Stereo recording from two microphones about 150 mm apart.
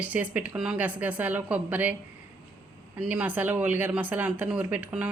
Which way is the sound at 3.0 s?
10° right (ahead or behind).